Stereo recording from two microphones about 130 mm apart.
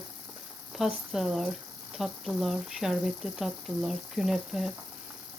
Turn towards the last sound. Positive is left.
turn(degrees=-5)  # may be behind; listen again after turning